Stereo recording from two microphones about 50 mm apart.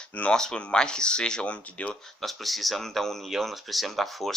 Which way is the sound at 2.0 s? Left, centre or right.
Centre.